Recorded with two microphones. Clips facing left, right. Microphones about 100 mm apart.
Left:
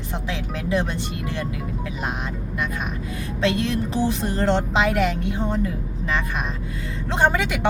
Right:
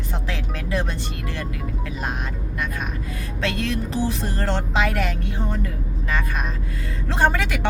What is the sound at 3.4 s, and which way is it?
Speech, 20° left (ahead or behind).